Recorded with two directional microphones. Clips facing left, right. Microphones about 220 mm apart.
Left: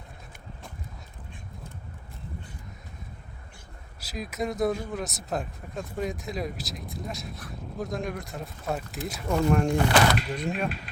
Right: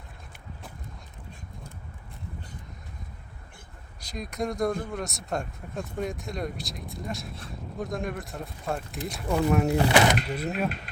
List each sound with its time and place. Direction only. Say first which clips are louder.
4.0 s speech: even; 5° left (ahead or behind)
9.7 s speech: right 1 dB; 20° right (ahead or behind)
10.3 s speech: right 1 dB; 5° right (ahead or behind)